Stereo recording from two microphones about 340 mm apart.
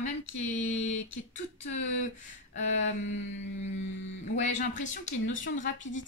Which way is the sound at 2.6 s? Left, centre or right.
Left.